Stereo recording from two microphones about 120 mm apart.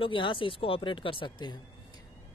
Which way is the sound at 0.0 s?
45° left (ahead or behind).